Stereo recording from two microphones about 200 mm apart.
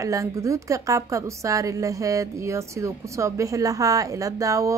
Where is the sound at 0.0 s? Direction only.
15° right (ahead or behind).